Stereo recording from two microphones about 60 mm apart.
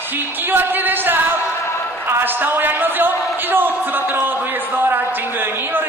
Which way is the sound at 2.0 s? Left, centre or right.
Right.